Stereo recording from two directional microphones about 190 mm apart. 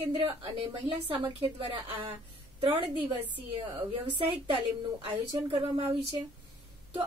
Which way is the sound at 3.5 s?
30° right (ahead or behind).